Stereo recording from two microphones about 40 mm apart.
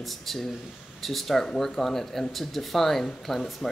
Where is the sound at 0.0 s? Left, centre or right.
Centre.